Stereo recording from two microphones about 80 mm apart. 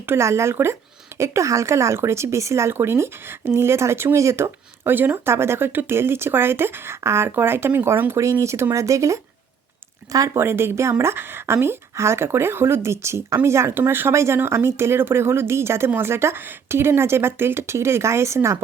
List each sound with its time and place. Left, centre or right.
0.0 s speech: right
10.3 s speech: right